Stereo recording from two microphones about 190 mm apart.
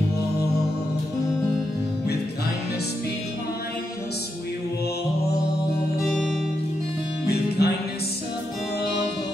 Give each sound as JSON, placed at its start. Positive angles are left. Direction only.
{"t": 7.2, "sound": "music", "side_deg": 60}